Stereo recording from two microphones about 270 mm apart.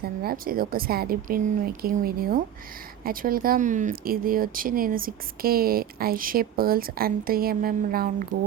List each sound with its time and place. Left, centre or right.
0.0 s speech: right